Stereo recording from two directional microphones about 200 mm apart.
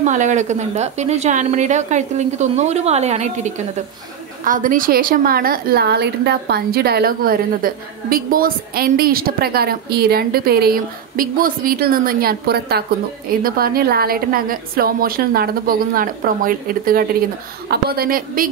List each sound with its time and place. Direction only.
0.0 s a woman's voice: 35° right (ahead or behind)